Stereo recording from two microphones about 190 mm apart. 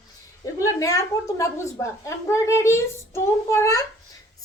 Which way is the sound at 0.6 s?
15° left (ahead or behind).